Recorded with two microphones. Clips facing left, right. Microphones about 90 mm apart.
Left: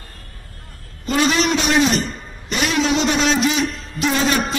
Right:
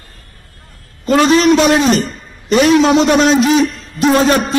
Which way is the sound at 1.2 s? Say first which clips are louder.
Right 8 dB; 40° right (ahead or behind).